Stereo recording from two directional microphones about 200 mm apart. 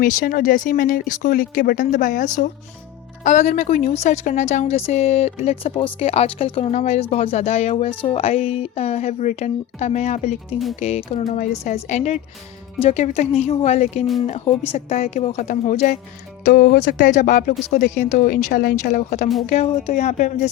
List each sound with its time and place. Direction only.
0.0 s a woman's voice: 40° left (ahead or behind)
11.3 s a woman's voice: 40° left (ahead or behind)
18.1 s a woman's voice: 40° left (ahead or behind)